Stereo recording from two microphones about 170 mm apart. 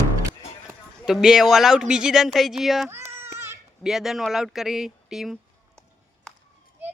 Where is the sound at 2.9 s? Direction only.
15° right (ahead or behind).